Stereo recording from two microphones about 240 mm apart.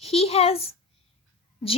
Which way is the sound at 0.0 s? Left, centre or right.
Left.